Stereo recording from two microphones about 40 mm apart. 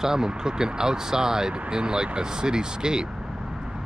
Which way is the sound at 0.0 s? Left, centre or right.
Centre.